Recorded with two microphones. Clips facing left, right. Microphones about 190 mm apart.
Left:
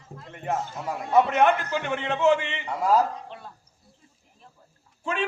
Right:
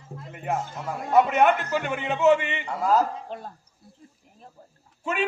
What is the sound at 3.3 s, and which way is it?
Speech, 40° right (ahead or behind).